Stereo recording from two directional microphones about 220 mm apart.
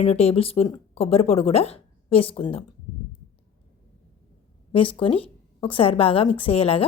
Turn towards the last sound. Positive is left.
turn(degrees=25)  # may be behind; listen again after turning